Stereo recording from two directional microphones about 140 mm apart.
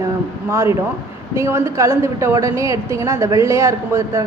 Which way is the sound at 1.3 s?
20° right (ahead or behind).